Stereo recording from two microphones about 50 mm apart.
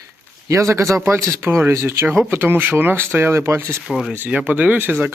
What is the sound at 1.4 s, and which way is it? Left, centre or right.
Speech, right.